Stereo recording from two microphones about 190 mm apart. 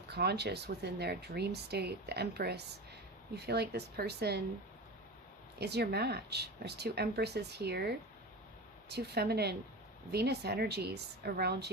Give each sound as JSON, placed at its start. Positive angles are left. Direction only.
{"t": 0.1, "sound": "speech", "side_deg": -60}
{"t": 5.5, "sound": "speech", "side_deg": -60}